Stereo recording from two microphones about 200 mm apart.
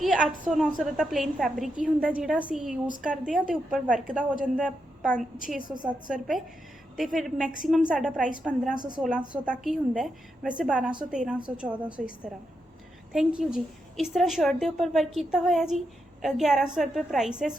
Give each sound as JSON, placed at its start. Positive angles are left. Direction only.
{"t": 0.0, "sound": "a woman's voice", "side_deg": 0}
{"t": 5.6, "sound": "a woman's voice", "side_deg": -20}
{"t": 5.9, "sound": "a woman's voice", "side_deg": -5}